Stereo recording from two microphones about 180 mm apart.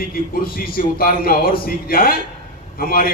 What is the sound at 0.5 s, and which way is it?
A man's voice, 55° left (ahead or behind).